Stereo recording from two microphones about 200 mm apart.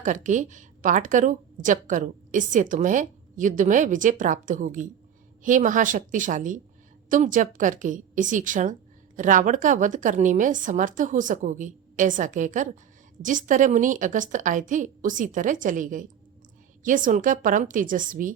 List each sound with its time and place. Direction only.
0.0 s a woman's voice: 40° right (ahead or behind)